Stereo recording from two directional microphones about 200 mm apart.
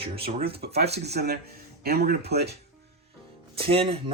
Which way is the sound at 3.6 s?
30° right (ahead or behind).